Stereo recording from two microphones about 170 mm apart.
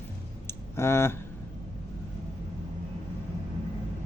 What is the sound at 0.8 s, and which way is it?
Speech, 15° left (ahead or behind).